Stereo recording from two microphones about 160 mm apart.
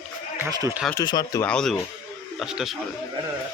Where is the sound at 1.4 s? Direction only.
5° left (ahead or behind).